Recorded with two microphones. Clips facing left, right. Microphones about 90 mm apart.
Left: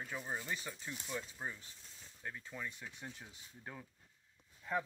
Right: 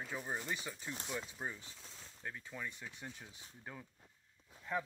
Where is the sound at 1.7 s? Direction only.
90° right.